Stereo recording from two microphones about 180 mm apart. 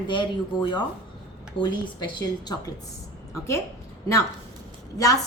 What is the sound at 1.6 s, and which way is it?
Speech, 25° left (ahead or behind).